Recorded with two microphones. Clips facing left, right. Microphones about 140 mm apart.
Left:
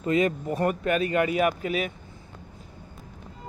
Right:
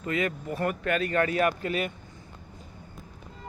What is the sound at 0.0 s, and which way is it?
Speech, 25° left (ahead or behind).